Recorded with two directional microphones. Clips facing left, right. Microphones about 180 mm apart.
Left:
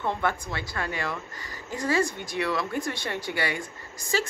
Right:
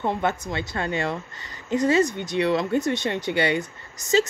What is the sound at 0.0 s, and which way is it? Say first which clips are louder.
Speech: right 3 dB; 20° right (ahead or behind).